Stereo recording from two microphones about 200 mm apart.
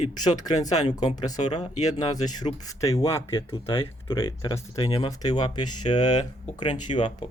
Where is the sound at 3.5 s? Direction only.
25° left (ahead or behind).